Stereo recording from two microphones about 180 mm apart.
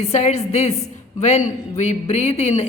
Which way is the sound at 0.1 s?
35° left (ahead or behind).